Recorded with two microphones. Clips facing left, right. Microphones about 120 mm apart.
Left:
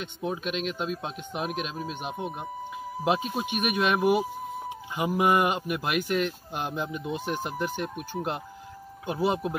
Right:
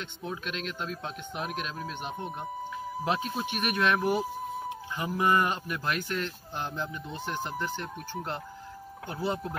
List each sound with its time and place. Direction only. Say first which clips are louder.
0.2 s speech: left 6 dB; 10° left (ahead or behind)